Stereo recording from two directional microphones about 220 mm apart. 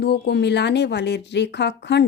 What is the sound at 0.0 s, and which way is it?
A woman's voice, 50° left (ahead or behind).